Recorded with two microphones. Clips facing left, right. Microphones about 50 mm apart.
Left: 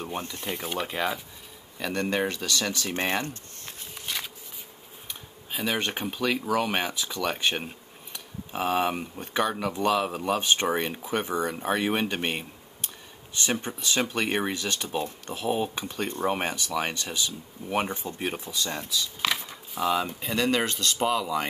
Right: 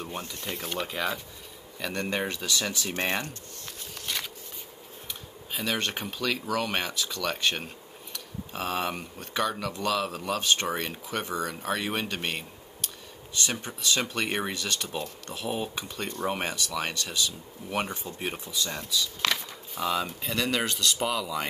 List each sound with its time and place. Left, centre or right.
0.2 s speech: left
0.5 s speech: centre
2.2 s speech: right
2.9 s speech: left
4.0 s a sound: centre
5.5 s speech: centre
15.7 s speech: left
16.3 s speech: centre
18.9 s speech: centre